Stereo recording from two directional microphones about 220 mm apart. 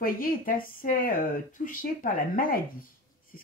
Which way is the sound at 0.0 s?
40° left (ahead or behind).